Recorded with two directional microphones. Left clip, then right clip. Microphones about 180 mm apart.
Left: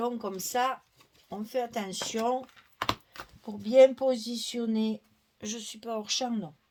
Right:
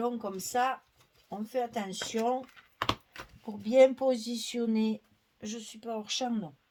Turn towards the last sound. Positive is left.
turn(degrees=35)  # may be behind; listen again after turning